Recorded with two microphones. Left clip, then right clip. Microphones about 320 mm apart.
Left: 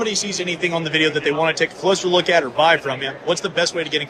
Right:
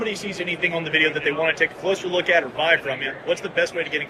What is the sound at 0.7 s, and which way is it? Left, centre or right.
Speech, left.